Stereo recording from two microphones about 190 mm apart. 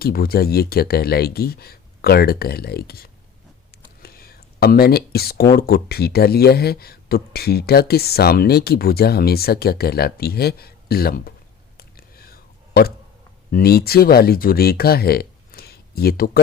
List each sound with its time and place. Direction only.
0.0 s speech: 50° left (ahead or behind)
11.8 s a sound: 50° left (ahead or behind)
13.5 s speech: 55° left (ahead or behind)